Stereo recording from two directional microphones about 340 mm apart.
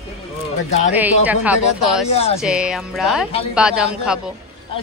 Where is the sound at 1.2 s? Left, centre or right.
Centre.